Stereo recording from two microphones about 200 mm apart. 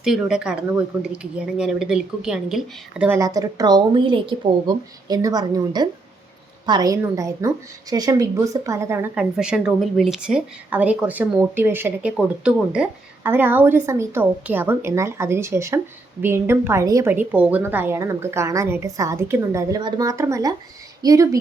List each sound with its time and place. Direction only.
0.0 s a woman's voice: 5° right (ahead or behind); by 21.2 s 20° right (ahead or behind)